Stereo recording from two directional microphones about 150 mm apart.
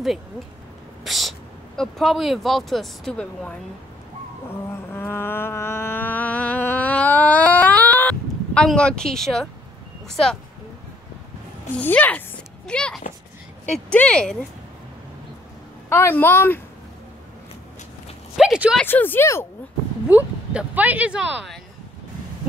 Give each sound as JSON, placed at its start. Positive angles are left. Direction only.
{"t": 1.0, "sound": "speech", "side_deg": 0}
{"t": 4.9, "sound": "music", "side_deg": 15}
{"t": 10.0, "sound": "speech", "side_deg": 5}
{"t": 11.8, "sound": "speech", "side_deg": 10}
{"t": 15.9, "sound": "speech", "side_deg": 15}
{"t": 18.3, "sound": "speech", "side_deg": -5}
{"t": 18.9, "sound": "speech", "side_deg": 15}
{"t": 20.1, "sound": "speech", "side_deg": -10}